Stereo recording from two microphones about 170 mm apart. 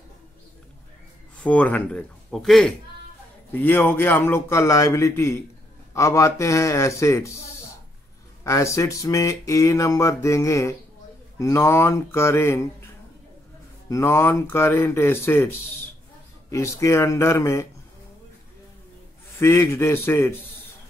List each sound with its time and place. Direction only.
1.4 s a man's voice: 10° left (ahead or behind)
8.5 s a man's voice: 15° left (ahead or behind)
13.8 s a man's voice: 15° left (ahead or behind)
19.4 s a man's voice: 15° left (ahead or behind)